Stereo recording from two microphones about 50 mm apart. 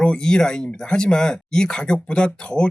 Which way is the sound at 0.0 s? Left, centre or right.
Centre.